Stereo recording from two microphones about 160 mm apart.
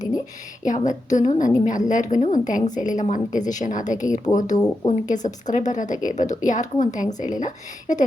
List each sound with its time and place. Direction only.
0.6 s a woman's voice: 50° left (ahead or behind)
4.5 s speech: 20° left (ahead or behind)
4.9 s a woman's voice: 50° left (ahead or behind)